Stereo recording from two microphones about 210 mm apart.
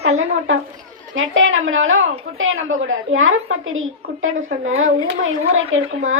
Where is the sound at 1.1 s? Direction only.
70° right (ahead or behind).